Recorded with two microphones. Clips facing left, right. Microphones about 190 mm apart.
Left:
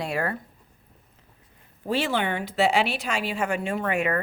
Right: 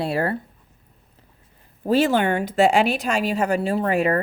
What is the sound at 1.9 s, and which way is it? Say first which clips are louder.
Speech: right 7 dB; 45° right (ahead or behind).